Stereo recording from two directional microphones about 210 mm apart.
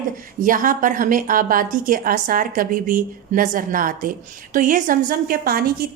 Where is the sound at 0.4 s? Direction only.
40° right (ahead or behind).